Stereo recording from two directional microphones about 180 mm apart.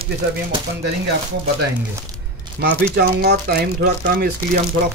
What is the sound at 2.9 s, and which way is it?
Speech, 60° right (ahead or behind).